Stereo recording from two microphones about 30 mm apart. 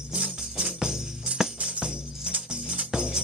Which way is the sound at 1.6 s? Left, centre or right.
Right.